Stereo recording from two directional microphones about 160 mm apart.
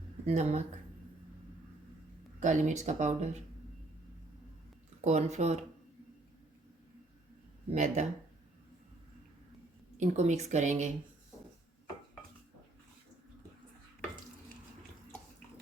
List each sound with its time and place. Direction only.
0.3 s speech: 45° right (ahead or behind)
2.4 s speech: 50° right (ahead or behind)
4.9 s speech: 45° right (ahead or behind)
7.7 s speech: 45° right (ahead or behind)
10.0 s speech: 45° right (ahead or behind)